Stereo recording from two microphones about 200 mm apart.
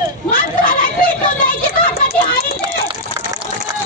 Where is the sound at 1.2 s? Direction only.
45° left (ahead or behind).